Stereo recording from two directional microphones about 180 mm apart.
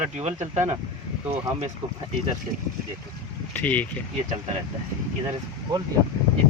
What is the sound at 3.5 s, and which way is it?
Speech, 10° left (ahead or behind).